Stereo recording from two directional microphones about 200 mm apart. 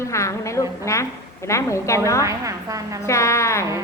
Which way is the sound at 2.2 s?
15° right (ahead or behind).